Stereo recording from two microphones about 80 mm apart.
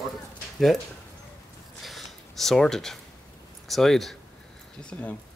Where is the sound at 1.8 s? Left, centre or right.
Centre.